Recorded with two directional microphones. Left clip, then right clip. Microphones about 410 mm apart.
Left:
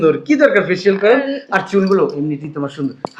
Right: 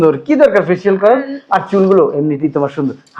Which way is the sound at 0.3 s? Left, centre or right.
Right.